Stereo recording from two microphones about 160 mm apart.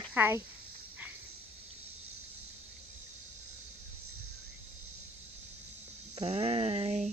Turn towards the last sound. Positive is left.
turn(degrees=-40)  # may be behind; listen again after turning